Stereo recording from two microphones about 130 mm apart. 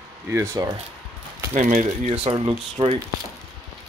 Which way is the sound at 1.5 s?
70° right (ahead or behind).